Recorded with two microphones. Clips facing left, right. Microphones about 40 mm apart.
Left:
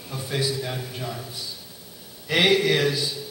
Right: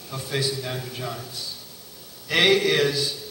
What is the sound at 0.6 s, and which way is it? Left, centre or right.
Speech, centre.